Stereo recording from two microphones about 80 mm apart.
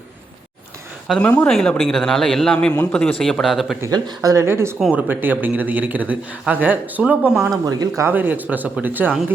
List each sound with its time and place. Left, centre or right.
1.2 s speech: centre
1.5 s a man's voice: centre
3.9 s speech: right
4.4 s speech: right
4.9 s a man's voice: right
7.6 s speech: right
8.0 s a man's voice: right